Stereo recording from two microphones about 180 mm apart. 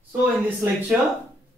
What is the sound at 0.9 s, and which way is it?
Speech, 5° right (ahead or behind).